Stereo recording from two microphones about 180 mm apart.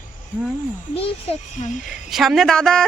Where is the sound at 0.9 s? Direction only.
30° left (ahead or behind).